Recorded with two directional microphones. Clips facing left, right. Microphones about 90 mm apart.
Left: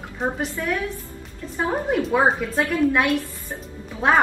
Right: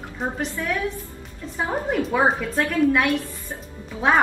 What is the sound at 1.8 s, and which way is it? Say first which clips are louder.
A woman's voice: left 1 dB; centre (ahead or behind).